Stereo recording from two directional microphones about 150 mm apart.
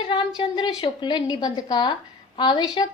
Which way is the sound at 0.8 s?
30° left (ahead or behind).